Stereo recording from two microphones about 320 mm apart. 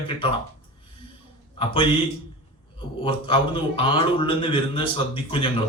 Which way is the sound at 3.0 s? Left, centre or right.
Centre.